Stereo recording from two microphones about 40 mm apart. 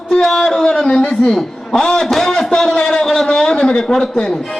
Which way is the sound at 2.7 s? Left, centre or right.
Centre.